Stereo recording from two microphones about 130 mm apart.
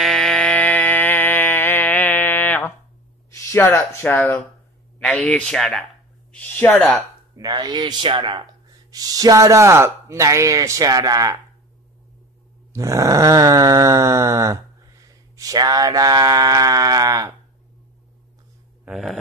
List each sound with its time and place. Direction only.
0.0 s a sound: 5° left (ahead or behind)
3.3 s speech: 20° left (ahead or behind)
4.9 s a sound: 10° left (ahead or behind)
5.2 s speech: 5° left (ahead or behind)
6.3 s speech: 15° left (ahead or behind)
7.3 s speech: 30° right (ahead or behind)
8.9 s groan: 30° right (ahead or behind)
12.7 s groan: 25° right (ahead or behind)
18.9 s speech: centre (ahead or behind)